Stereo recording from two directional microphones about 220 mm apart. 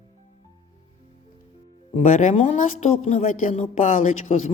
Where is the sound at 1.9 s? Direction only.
35° left (ahead or behind).